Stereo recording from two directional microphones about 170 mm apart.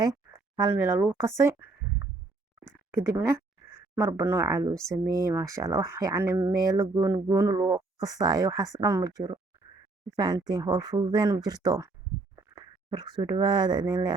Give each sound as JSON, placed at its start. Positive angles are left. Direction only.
{"t": 0.6, "sound": "speech", "side_deg": -15}